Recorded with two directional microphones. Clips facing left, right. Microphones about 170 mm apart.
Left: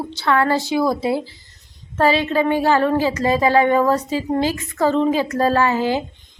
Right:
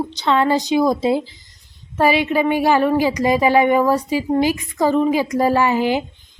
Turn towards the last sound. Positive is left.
turn(degrees=-15)  # may be behind; listen again after turning